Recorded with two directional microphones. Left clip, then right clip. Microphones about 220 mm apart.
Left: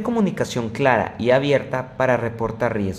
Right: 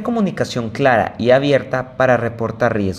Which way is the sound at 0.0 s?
Centre (ahead or behind).